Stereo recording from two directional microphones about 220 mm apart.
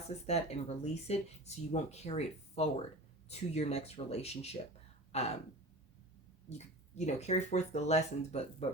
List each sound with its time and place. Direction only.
0.3 s speech: 30° left (ahead or behind)
6.9 s speech: 30° left (ahead or behind)